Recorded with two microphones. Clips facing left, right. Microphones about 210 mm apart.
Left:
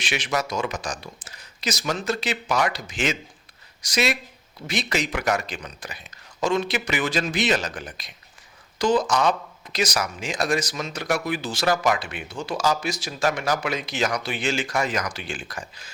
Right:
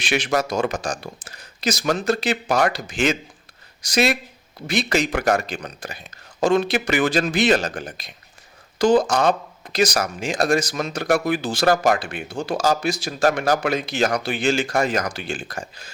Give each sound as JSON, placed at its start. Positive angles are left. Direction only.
{"t": 0.0, "sound": "speech", "side_deg": -55}